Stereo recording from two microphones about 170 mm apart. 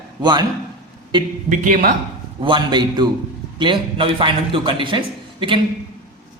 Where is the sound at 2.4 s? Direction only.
25° right (ahead or behind).